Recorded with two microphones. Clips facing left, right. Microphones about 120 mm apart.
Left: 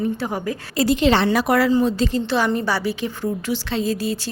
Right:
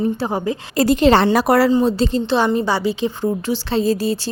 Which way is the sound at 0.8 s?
45° right (ahead or behind).